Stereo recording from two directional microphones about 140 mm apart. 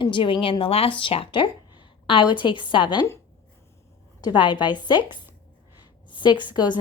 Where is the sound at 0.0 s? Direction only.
35° left (ahead or behind).